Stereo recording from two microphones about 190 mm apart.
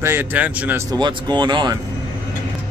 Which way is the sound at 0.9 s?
20° right (ahead or behind).